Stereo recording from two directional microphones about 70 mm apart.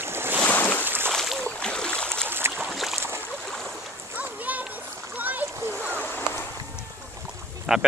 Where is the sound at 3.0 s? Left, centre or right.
Right.